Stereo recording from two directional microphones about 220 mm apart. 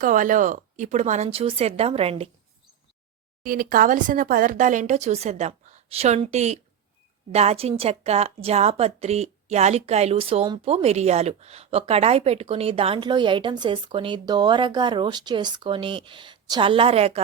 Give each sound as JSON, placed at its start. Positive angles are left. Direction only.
{"t": 0.0, "sound": "speech", "side_deg": -35}
{"t": 3.4, "sound": "a woman's voice", "side_deg": -40}